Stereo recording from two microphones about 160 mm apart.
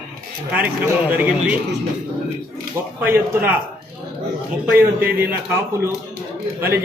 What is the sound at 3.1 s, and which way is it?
Speech, 15° right (ahead or behind).